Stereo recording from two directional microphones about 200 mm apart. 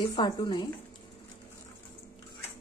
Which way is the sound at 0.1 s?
20° left (ahead or behind).